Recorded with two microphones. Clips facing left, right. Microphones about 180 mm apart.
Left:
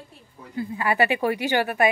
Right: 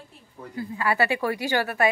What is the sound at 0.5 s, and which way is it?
A woman's voice, 15° left (ahead or behind).